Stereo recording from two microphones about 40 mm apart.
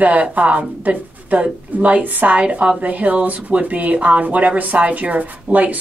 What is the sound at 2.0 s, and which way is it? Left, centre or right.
Speech, right.